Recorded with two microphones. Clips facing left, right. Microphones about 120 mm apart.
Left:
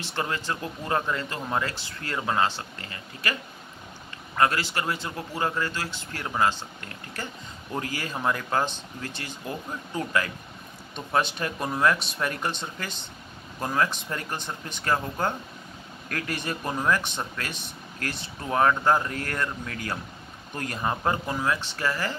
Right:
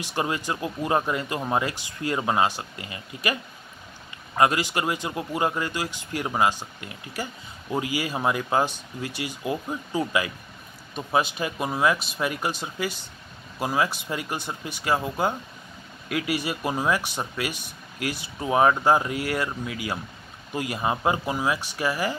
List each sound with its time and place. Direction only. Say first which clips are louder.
0.0 s speech: right 3 dB; 15° right (ahead or behind)
4.4 s speech: right 3 dB; 15° right (ahead or behind)